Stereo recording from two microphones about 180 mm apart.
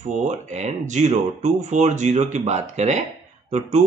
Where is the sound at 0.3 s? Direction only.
40° right (ahead or behind).